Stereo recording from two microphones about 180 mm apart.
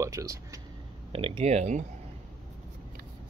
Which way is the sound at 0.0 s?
15° right (ahead or behind).